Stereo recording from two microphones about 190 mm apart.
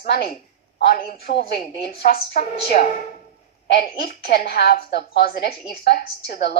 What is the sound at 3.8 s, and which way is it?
A woman's voice, 50° left (ahead or behind).